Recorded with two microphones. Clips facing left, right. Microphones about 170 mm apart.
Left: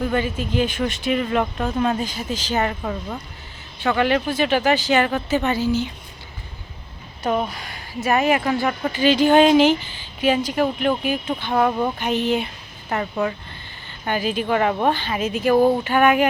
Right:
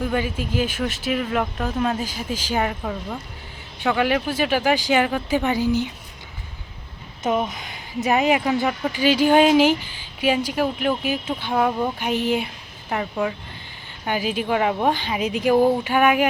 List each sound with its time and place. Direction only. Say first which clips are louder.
0.0 s speech: left 1 dB; 10° right (ahead or behind)
7.4 s speech: even; 20° right (ahead or behind)